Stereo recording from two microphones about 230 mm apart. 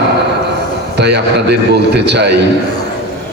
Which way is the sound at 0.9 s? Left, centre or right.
Right.